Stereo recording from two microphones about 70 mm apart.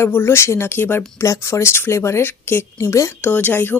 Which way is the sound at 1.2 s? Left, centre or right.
Left.